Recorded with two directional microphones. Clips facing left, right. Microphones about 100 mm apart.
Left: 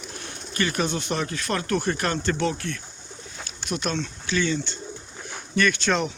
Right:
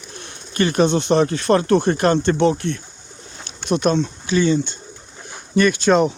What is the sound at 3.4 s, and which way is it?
Pigeon, 30° right (ahead or behind).